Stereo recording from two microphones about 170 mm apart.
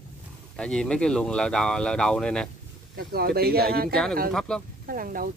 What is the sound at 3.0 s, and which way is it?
Speech, 65° right (ahead or behind).